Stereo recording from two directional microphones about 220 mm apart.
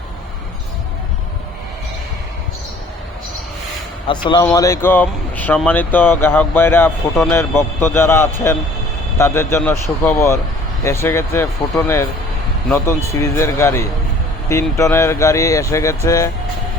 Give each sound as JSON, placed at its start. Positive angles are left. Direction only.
{"t": 4.0, "sound": "speech", "side_deg": 20}